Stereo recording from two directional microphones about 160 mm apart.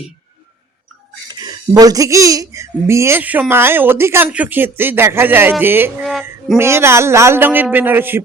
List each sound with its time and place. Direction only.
1.3 s speech: 25° right (ahead or behind)
6.0 s a sound: centre (ahead or behind)
6.6 s speech: 15° right (ahead or behind)